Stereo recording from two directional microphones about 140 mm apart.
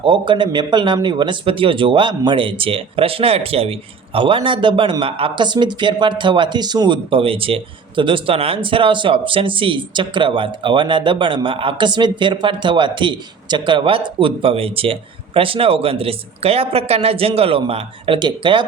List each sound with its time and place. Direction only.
0.0 s speech: 35° right (ahead or behind)